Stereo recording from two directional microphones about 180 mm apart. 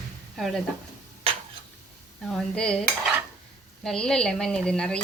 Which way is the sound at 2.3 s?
5° left (ahead or behind).